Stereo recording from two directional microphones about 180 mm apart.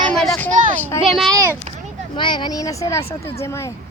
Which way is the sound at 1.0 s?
Centre (ahead or behind).